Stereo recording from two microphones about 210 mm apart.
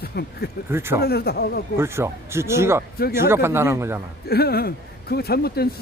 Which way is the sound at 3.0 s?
45° left (ahead or behind).